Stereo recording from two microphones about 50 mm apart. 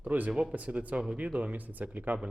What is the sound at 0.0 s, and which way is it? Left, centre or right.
Speech, right.